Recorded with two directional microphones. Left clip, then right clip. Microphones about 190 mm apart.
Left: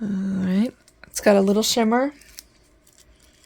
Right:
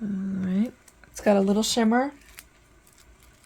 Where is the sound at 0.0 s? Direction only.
55° left (ahead or behind).